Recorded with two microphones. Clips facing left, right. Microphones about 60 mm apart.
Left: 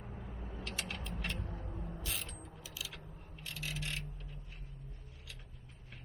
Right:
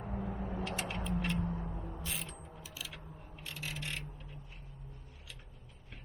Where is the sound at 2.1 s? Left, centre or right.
Centre.